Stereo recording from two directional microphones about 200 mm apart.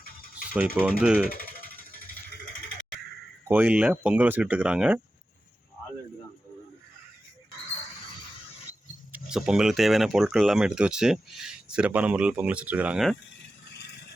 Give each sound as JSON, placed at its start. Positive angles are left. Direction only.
{"t": 0.5, "sound": "speech", "side_deg": -10}
{"t": 1.3, "sound": "music", "side_deg": 45}
{"t": 3.5, "sound": "speech", "side_deg": -10}
{"t": 9.1, "sound": "speech", "side_deg": -5}